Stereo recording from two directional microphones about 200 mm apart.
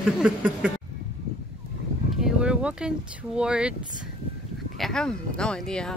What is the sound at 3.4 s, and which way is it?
Speech, 5° right (ahead or behind).